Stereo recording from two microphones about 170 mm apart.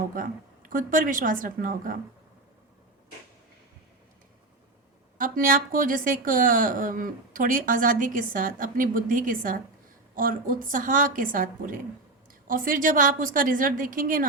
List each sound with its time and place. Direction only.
0.2 s speech: 55° right (ahead or behind)
5.1 s speech: 55° right (ahead or behind)